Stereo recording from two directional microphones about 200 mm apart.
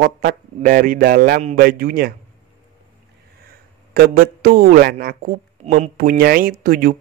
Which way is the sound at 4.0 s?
45° right (ahead or behind).